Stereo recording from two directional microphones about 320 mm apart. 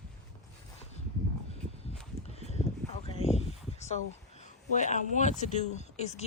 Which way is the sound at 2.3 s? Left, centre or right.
Centre.